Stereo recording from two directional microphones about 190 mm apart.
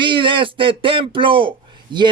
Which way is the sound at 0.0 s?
25° right (ahead or behind).